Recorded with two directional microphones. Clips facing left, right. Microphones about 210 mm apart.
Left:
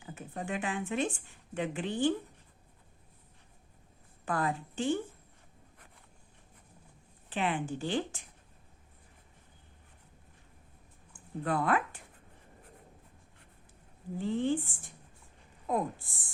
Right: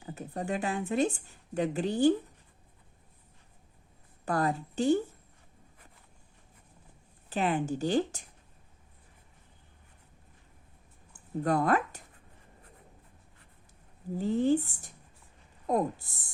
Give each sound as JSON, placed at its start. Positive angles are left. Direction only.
{"t": 0.0, "sound": "speech", "side_deg": -40}
{"t": 4.3, "sound": "speech", "side_deg": -40}
{"t": 7.3, "sound": "speech", "side_deg": -40}
{"t": 11.1, "sound": "speech", "side_deg": -40}
{"t": 14.2, "sound": "speech", "side_deg": -40}